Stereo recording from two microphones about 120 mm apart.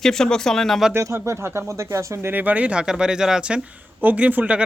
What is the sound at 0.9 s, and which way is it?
Speech, 20° right (ahead or behind).